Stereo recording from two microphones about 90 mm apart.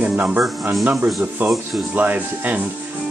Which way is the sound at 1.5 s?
Centre (ahead or behind).